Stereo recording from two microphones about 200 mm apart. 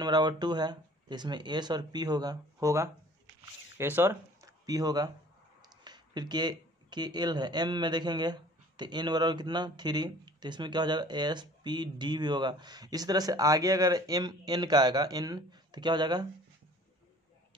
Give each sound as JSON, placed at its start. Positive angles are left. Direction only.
{"t": 0.0, "sound": "speech", "side_deg": -20}